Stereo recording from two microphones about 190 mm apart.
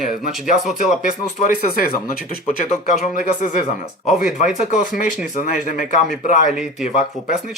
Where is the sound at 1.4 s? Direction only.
40° left (ahead or behind).